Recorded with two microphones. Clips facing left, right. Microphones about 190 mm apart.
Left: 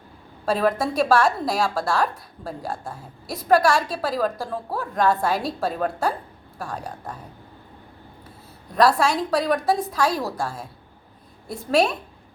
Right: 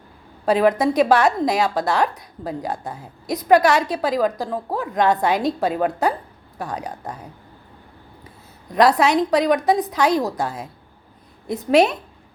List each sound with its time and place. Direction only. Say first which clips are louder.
0.4 s a woman's voice: right 5 dB; 20° right (ahead or behind)
8.7 s a woman's voice: right 3 dB; 20° right (ahead or behind)